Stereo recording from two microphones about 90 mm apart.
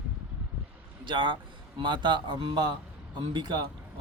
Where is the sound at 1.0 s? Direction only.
60° right (ahead or behind).